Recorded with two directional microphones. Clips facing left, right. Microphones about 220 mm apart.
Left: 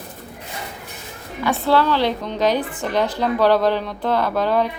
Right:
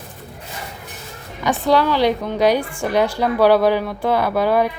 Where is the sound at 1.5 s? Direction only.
15° right (ahead or behind).